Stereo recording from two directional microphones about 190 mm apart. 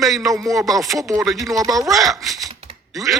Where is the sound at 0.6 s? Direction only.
Centre (ahead or behind).